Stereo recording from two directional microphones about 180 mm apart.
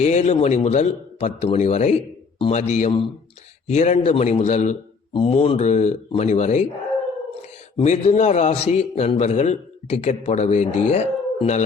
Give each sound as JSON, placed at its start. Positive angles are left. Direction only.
{"t": 0.0, "sound": "a man's voice", "side_deg": 40}
{"t": 7.8, "sound": "a man's voice", "side_deg": 40}